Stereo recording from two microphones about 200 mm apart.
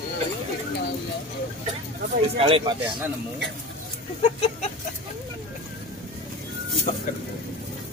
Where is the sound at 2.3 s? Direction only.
25° right (ahead or behind).